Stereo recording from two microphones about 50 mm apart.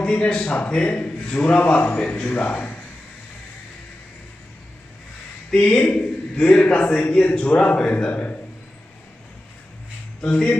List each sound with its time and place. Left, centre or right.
0.0 s speech: left
5.6 s speech: left
10.2 s speech: centre